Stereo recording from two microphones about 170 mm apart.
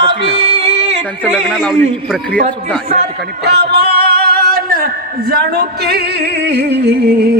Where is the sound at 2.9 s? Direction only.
70° right (ahead or behind).